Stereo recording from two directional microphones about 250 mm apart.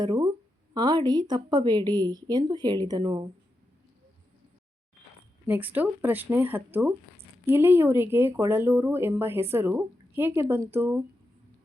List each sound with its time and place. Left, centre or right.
0.0 s speech: centre
5.5 s speech: centre